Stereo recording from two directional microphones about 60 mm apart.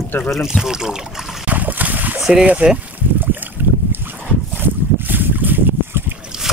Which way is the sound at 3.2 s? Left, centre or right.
Right.